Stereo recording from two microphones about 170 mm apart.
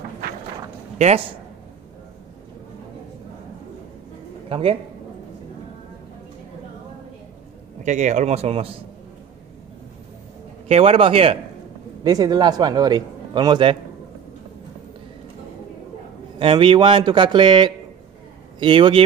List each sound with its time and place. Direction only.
0.9 s speech: 40° right (ahead or behind)
4.5 s a man's voice: 35° right (ahead or behind)
7.8 s a man's voice: 45° right (ahead or behind)
10.7 s a man's voice: 35° right (ahead or behind)
16.3 s a man's voice: 30° right (ahead or behind)